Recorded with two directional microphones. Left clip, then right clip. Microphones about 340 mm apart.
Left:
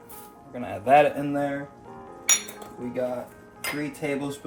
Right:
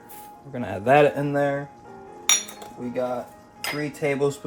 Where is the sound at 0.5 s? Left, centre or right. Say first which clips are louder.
Even; right.